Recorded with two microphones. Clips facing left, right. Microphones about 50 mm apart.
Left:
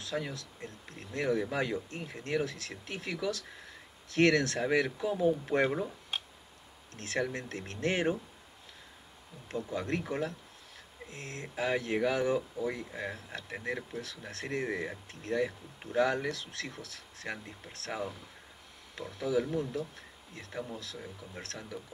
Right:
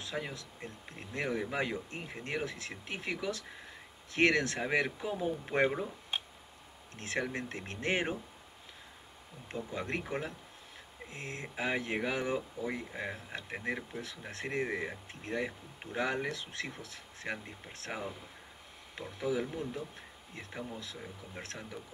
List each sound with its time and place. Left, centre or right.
0.0 s speech: centre
9.5 s speech: centre